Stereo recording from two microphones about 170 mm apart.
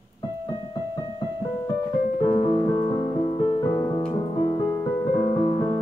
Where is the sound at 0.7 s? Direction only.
25° left (ahead or behind).